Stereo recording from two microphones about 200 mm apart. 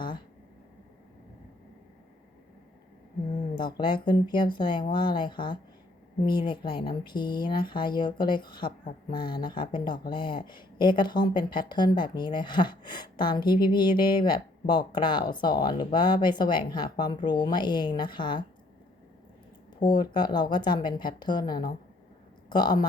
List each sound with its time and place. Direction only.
3.6 s speech: 25° left (ahead or behind)
19.8 s speech: 20° left (ahead or behind)